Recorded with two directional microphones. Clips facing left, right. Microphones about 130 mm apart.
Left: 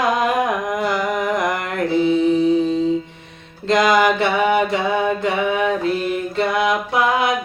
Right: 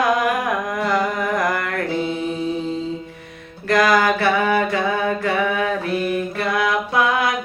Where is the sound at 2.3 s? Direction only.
20° left (ahead or behind).